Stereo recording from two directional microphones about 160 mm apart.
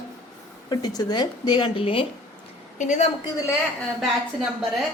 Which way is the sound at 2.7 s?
50° left (ahead or behind).